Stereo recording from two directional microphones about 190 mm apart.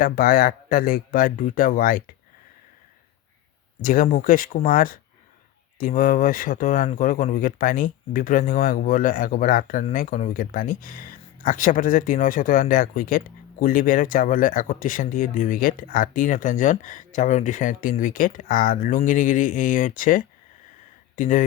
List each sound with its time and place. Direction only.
0.0 s speech: 50° left (ahead or behind)
3.8 s speech: 45° left (ahead or behind)